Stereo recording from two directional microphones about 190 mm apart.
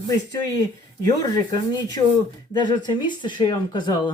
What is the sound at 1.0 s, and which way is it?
Speech, 20° left (ahead or behind).